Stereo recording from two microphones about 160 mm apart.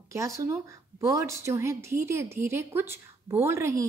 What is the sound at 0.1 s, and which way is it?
Speech, 20° right (ahead or behind).